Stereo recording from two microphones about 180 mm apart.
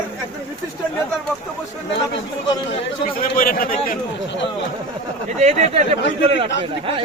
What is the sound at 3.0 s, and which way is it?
Speech, 50° left (ahead or behind).